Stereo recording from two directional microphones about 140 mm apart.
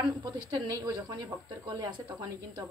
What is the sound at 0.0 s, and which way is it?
Speech, 30° right (ahead or behind).